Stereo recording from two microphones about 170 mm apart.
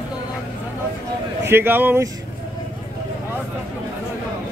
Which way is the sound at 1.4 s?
15° right (ahead or behind).